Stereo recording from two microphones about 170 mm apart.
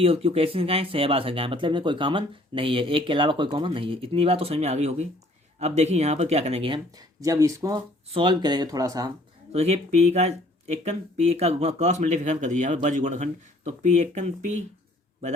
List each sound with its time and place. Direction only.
0.0 s speech: 35° right (ahead or behind)
6.9 s speech: 20° right (ahead or behind)
9.5 s speech: 40° right (ahead or behind)